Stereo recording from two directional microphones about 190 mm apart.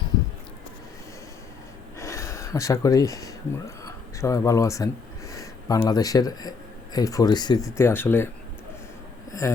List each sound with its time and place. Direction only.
2.0 s a sound: 15° left (ahead or behind)
3.8 s speech: 15° left (ahead or behind)
9.4 s speech: 15° left (ahead or behind)